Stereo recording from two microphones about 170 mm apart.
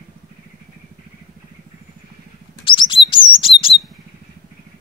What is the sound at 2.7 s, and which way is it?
Chirp, 30° left (ahead or behind).